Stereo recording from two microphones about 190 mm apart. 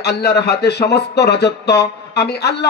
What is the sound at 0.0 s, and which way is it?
Speech, 60° left (ahead or behind).